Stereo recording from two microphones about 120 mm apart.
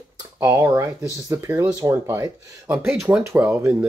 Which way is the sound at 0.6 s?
20° right (ahead or behind).